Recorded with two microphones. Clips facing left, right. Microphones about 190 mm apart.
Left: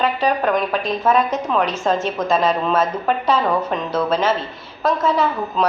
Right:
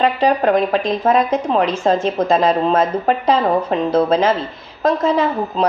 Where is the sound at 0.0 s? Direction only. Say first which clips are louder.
Right 4 dB; 30° right (ahead or behind).